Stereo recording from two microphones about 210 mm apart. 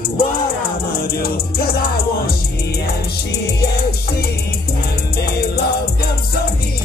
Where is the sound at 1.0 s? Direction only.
45° left (ahead or behind).